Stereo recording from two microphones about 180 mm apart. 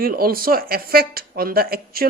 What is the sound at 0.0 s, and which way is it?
Speech, 55° right (ahead or behind).